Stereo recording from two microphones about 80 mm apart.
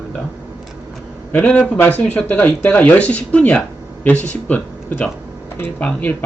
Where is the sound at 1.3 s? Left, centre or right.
Centre.